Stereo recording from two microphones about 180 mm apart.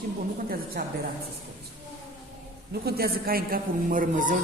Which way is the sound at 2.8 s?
60° right (ahead or behind).